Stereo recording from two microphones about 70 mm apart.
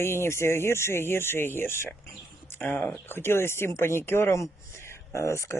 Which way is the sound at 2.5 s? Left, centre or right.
Left.